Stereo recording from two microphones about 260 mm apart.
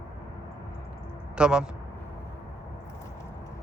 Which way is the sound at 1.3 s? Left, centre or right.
Centre.